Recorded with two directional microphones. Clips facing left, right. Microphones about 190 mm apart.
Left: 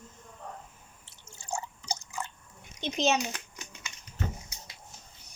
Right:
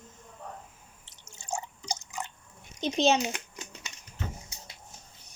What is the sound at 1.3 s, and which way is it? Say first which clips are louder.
Drip: right 1 dB; 20° right (ahead or behind).